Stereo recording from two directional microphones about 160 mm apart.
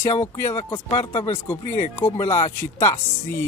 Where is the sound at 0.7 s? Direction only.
30° left (ahead or behind).